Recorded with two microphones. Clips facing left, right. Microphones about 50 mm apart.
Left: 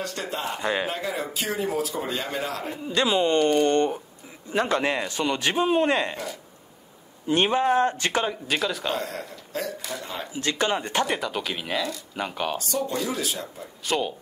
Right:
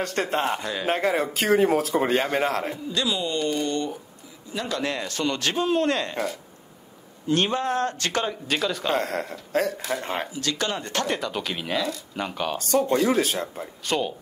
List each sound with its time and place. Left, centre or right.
0.0 s speech: right
0.6 s a man's voice: left
0.8 s speech: right
2.9 s a man's voice: left
7.2 s speech: centre
8.9 s speech: right
10.3 s a man's voice: left
11.1 s speech: centre
12.5 s speech: right
13.8 s speech: centre